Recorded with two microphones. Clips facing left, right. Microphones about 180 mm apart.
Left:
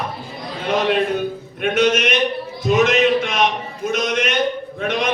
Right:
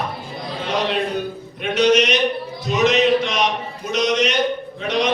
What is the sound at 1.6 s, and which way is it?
Speech, 55° left (ahead or behind).